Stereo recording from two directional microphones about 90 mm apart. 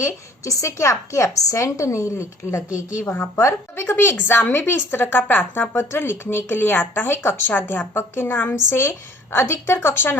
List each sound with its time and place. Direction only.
0.4 s a woman's voice: 35° left (ahead or behind)